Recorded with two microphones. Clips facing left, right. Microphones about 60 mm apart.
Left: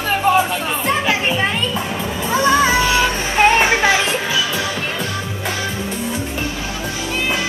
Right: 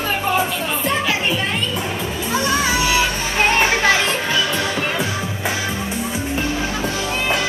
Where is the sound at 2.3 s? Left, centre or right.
Left.